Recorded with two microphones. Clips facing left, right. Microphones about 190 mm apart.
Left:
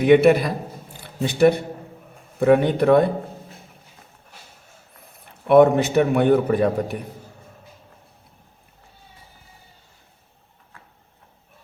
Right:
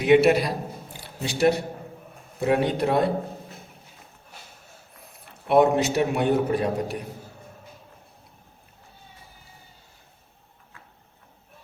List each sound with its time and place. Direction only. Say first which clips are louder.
0.0 s a man's voice: left 3 dB; 55° left (ahead or behind)
5.5 s a man's voice: left 5 dB; 55° left (ahead or behind)